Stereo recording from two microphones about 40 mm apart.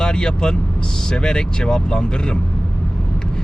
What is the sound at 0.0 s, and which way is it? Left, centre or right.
Speech, centre.